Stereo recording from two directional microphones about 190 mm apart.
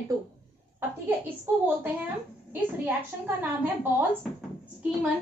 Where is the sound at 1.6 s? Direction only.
10° right (ahead or behind).